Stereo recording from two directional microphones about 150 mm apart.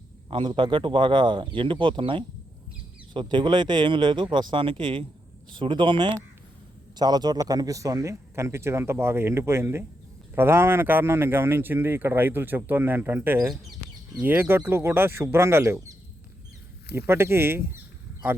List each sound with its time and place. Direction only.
0.3 s a man's voice: 35° right (ahead or behind); by 16.0 s 20° right (ahead or behind)
17.1 s a man's voice: 15° right (ahead or behind)